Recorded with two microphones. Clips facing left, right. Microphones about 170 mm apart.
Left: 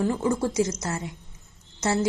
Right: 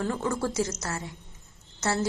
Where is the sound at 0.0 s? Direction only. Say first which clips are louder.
Left 4 dB; 20° left (ahead or behind).